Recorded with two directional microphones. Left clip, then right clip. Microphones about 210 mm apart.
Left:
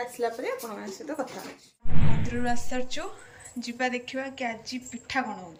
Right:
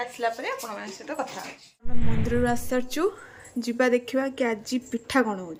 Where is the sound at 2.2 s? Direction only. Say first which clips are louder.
Right 8 dB; 20° right (ahead or behind).